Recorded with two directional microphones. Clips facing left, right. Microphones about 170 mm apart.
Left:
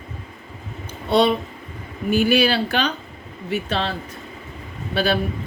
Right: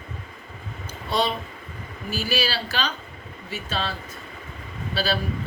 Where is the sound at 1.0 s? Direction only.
65° left (ahead or behind).